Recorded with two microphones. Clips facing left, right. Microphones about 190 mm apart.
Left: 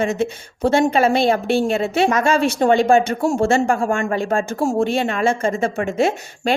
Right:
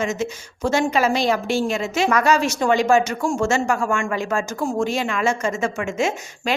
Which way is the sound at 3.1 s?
65° left (ahead or behind).